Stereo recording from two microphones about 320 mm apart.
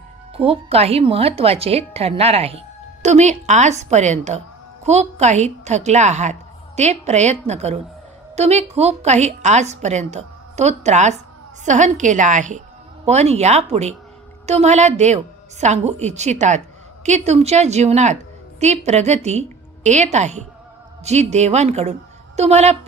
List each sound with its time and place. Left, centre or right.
0.3 s a woman's voice: centre